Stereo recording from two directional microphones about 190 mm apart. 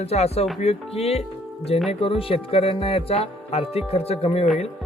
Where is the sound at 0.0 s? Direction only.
35° left (ahead or behind).